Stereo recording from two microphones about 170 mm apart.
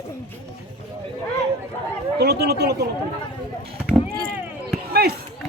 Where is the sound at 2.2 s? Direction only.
70° right (ahead or behind).